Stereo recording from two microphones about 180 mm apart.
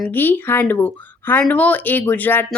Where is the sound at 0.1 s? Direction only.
10° left (ahead or behind).